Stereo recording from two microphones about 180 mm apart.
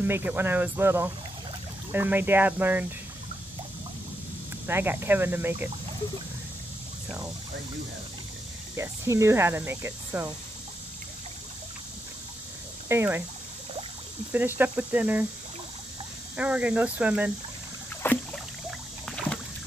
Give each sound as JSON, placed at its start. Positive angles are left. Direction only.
{"t": 0.0, "sound": "speech", "side_deg": -10}
{"t": 4.6, "sound": "speech", "side_deg": -10}
{"t": 8.7, "sound": "speech", "side_deg": -15}
{"t": 12.8, "sound": "speech", "side_deg": -15}
{"t": 14.3, "sound": "speech", "side_deg": -10}
{"t": 16.3, "sound": "speech", "side_deg": -5}
{"t": 18.0, "sound": "rowboat", "side_deg": 10}